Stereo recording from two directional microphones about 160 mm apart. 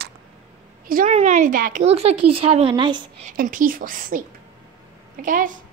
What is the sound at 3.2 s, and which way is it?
A woman's voice, 60° right (ahead or behind).